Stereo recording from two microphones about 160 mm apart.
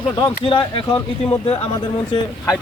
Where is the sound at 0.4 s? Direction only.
30° left (ahead or behind).